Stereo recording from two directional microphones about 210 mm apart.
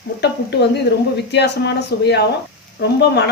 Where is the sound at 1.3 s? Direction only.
55° left (ahead or behind).